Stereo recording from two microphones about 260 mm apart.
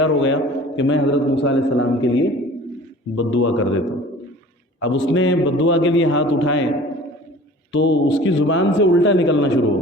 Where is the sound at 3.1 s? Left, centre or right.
Left.